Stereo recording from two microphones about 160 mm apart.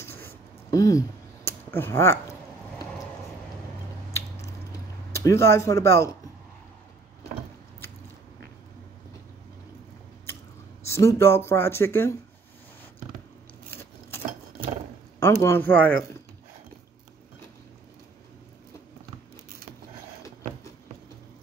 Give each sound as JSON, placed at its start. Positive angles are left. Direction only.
{"t": 0.0, "sound": "a sound", "side_deg": 15}
{"t": 5.1, "sound": "speech", "side_deg": 15}
{"t": 10.9, "sound": "speech", "side_deg": 20}
{"t": 15.1, "sound": "speech", "side_deg": 15}